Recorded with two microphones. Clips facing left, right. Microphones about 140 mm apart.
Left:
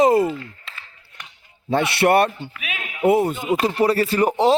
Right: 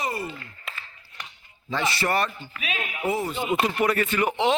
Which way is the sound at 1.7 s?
65° left (ahead or behind).